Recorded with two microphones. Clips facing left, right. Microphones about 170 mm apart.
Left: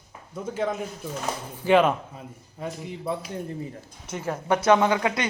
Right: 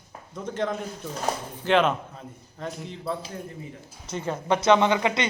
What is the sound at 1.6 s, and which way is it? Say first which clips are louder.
A man's voice: left 3 dB; 10° left (ahead or behind).